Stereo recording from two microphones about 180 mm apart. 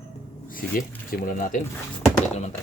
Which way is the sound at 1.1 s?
55° left (ahead or behind).